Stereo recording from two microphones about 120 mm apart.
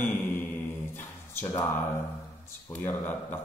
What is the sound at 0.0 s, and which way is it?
Mantra, 20° left (ahead or behind).